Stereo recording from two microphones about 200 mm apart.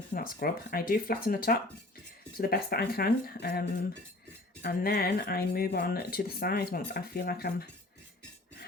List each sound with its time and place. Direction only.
0.1 s speech: 45° left (ahead or behind)